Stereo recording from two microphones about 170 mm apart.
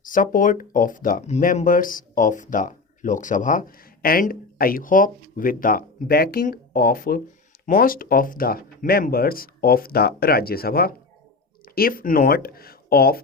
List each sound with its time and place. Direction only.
0.0 s speech: 50° left (ahead or behind)